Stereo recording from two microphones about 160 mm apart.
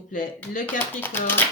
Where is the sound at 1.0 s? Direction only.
15° left (ahead or behind).